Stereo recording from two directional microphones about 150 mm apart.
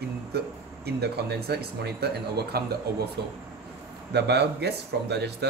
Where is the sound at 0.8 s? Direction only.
90° right.